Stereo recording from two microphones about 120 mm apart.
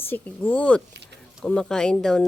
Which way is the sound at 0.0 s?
15° left (ahead or behind).